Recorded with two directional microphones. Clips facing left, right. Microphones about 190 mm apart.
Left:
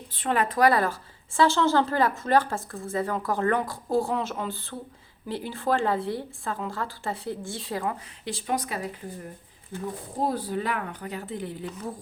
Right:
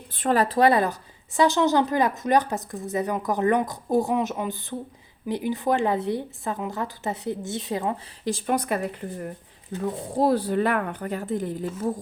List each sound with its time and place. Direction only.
0.2 s a woman's voice: 40° right (ahead or behind); by 7.9 s 20° right (ahead or behind)
8.2 s speech: 50° right (ahead or behind)